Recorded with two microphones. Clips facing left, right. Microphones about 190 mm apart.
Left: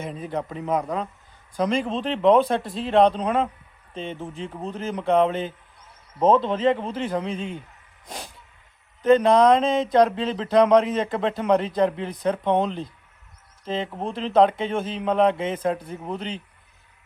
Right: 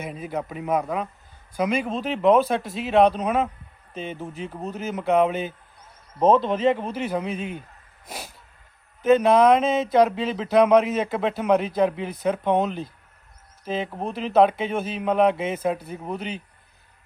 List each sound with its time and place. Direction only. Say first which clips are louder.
0.0 s speech: left 1 dB; 10° right (ahead or behind)
7.3 s a man's voice: even; 30° left (ahead or behind)
9.0 s speech: even; 5° right (ahead or behind)